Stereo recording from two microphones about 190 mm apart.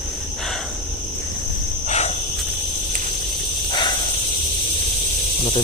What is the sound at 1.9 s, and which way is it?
Cricket, 35° left (ahead or behind).